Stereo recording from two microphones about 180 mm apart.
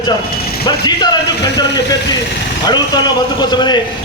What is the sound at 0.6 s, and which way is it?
A man's voice, 25° left (ahead or behind).